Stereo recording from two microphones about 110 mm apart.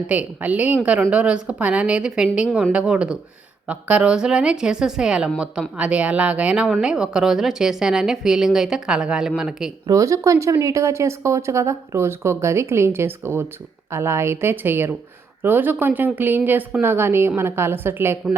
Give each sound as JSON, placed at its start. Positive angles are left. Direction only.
{"t": 0.1, "sound": "a woman's voice", "side_deg": -10}
{"t": 9.8, "sound": "a woman's voice", "side_deg": -30}